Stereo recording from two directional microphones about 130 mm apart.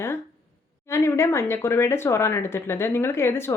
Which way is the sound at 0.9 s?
20° left (ahead or behind).